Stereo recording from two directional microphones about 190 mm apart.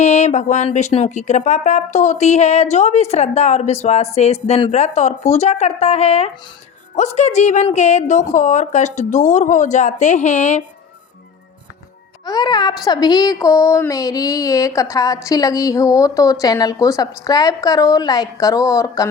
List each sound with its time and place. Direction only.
0.0 s speech: 35° left (ahead or behind)
12.2 s a woman's voice: 20° left (ahead or behind)